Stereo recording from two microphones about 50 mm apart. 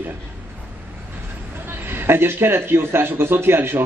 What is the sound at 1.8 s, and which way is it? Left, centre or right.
A man's voice, right.